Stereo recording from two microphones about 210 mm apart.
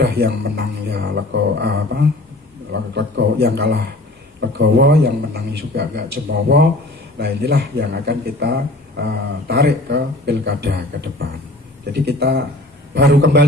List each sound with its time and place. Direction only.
0.0 s speech: 50° right (ahead or behind)